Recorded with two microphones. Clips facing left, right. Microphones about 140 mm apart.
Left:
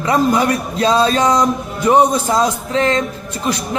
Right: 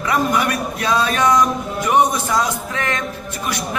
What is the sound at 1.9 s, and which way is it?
Speech, 30° left (ahead or behind).